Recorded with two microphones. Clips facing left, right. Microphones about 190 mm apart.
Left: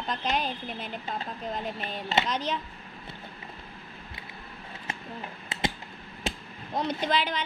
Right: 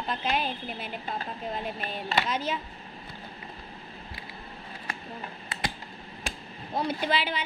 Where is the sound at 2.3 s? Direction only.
5° right (ahead or behind).